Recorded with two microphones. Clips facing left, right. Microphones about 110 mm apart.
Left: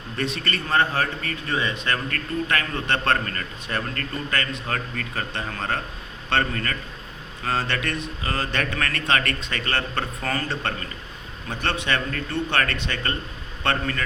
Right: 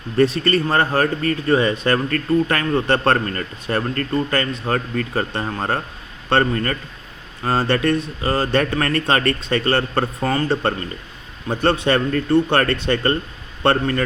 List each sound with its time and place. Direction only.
0.2 s a man's voice: 35° right (ahead or behind)